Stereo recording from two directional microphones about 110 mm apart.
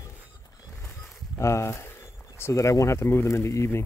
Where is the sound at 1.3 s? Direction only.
25° left (ahead or behind).